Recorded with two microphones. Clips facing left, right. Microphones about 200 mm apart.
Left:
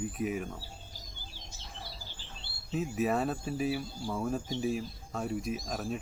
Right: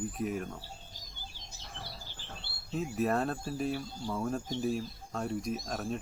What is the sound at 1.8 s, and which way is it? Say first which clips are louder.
Bird vocalization: right 1 dB; 60° right (ahead or behind).